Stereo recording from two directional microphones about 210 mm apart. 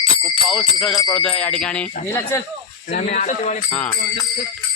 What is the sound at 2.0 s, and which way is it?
Speech, 10° left (ahead or behind).